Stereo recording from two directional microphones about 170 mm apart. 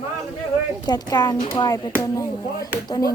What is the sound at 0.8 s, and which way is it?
Speech, 25° left (ahead or behind).